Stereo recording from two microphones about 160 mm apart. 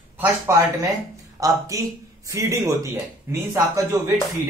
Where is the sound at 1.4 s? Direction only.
20° right (ahead or behind).